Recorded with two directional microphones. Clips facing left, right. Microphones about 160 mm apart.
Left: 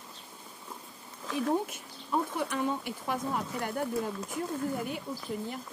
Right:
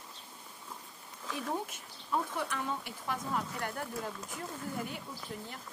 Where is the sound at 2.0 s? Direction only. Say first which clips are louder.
Left 3 dB; 15° left (ahead or behind).